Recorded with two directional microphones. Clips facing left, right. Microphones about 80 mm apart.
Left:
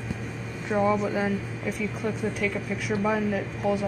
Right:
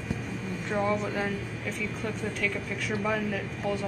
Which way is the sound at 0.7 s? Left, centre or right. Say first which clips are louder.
Left 5 dB; centre.